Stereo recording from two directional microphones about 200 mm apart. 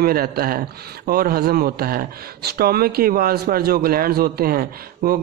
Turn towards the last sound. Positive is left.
turn(degrees=-45)  # may be behind; listen again after turning